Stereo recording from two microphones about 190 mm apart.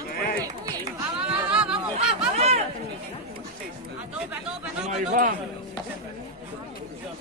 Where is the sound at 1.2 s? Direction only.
5° right (ahead or behind).